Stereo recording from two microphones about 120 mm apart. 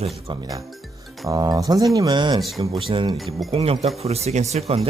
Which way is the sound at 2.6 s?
50° right (ahead or behind).